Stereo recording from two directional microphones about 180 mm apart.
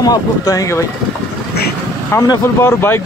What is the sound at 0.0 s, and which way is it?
Speech, 20° left (ahead or behind).